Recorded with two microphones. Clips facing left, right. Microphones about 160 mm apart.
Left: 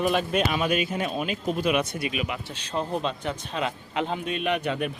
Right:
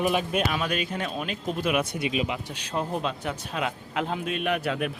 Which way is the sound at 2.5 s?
10° right (ahead or behind).